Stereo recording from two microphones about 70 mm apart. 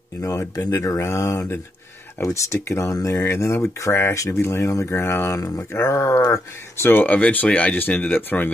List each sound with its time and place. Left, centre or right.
0.2 s speech: left